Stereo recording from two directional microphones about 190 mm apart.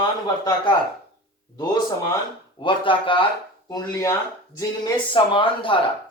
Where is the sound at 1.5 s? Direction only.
20° left (ahead or behind).